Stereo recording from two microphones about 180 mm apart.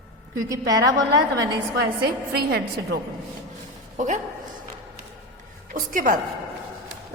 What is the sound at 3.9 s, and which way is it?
Speech, 40° right (ahead or behind).